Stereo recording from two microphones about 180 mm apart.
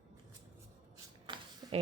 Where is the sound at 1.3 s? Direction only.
25° right (ahead or behind).